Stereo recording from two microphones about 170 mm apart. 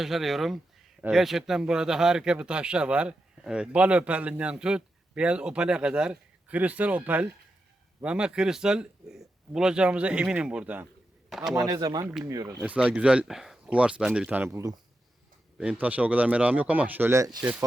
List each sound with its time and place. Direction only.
0.0 s a man's voice: centre (ahead or behind)
11.5 s speech: 20° right (ahead or behind)
12.6 s speech: 5° right (ahead or behind)
15.5 s speech: 5° right (ahead or behind)